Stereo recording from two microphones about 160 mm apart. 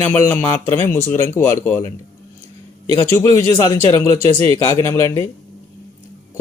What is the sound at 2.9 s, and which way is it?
Speech, 15° left (ahead or behind).